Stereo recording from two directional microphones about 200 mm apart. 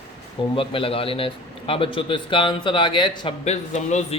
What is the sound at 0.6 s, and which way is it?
A man's voice, 25° left (ahead or behind).